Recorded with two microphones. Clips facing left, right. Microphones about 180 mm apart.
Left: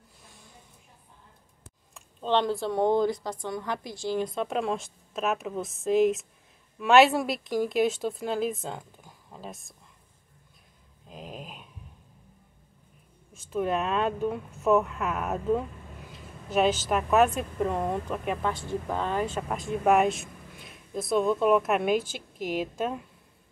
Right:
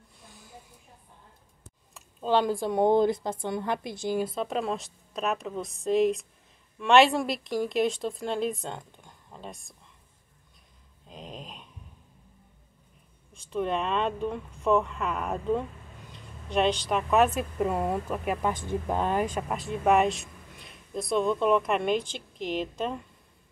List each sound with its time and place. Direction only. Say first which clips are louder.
0.2 s a sound: right 3 dB; centre (ahead or behind)
2.0 s a woman's voice: right 1 dB; 10° right (ahead or behind)
4.2 s speech: even; centre (ahead or behind)
11.1 s a sound: left 1 dB; 5° left (ahead or behind)
13.3 s speech: left 1 dB; 5° left (ahead or behind)
18.5 s speech: right 1 dB; 20° right (ahead or behind)
19.5 s speech: left 1 dB; centre (ahead or behind)